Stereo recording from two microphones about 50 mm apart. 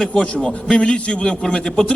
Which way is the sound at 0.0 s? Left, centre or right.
Left.